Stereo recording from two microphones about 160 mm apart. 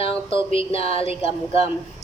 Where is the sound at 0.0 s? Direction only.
35° left (ahead or behind).